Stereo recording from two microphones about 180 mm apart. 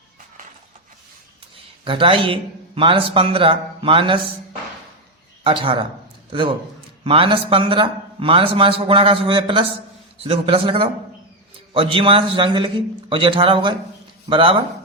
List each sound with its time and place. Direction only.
1.8 s a man's voice: 30° right (ahead or behind)
5.4 s a man's voice: 30° right (ahead or behind)